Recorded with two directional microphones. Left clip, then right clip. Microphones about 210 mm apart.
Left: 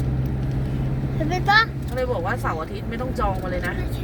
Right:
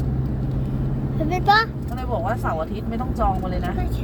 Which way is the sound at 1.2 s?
10° right (ahead or behind).